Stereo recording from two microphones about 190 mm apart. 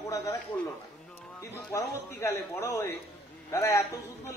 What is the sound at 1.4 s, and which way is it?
A man's voice, 15° left (ahead or behind).